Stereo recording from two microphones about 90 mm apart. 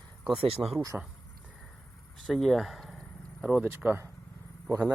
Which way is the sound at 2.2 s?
Centre (ahead or behind).